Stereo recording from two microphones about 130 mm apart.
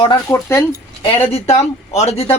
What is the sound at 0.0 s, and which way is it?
Speech, 30° left (ahead or behind).